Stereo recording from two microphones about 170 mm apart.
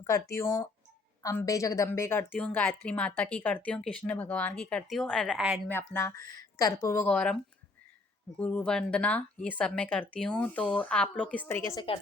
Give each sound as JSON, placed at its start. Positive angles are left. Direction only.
{"t": 0.0, "sound": "a woman's voice", "side_deg": 20}
{"t": 5.6, "sound": "a woman's voice", "side_deg": 10}
{"t": 8.4, "sound": "a woman's voice", "side_deg": 10}